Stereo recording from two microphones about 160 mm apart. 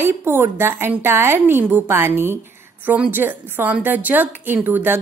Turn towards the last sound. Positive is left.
turn(degrees=-10)  # may be behind; listen again after turning